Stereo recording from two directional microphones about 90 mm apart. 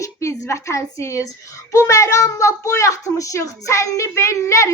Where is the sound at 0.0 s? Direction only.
35° left (ahead or behind).